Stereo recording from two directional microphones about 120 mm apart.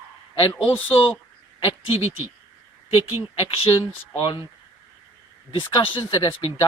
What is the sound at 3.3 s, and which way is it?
Speech, 50° left (ahead or behind).